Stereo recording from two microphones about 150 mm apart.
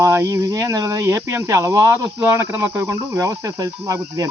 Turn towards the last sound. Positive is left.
turn(degrees=-20)  # may be behind; listen again after turning